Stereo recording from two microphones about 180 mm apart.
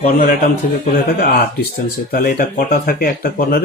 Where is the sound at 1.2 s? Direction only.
55° left (ahead or behind).